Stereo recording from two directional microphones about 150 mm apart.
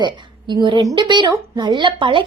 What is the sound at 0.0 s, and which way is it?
A woman's voice, 30° right (ahead or behind).